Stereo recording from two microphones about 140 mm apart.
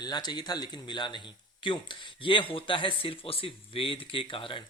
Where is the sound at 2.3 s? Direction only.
40° left (ahead or behind).